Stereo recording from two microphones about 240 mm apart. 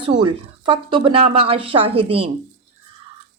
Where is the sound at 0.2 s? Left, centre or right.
Centre.